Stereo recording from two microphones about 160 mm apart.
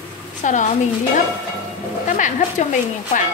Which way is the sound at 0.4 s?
50° left (ahead or behind).